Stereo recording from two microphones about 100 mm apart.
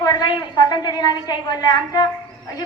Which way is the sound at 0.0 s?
40° left (ahead or behind).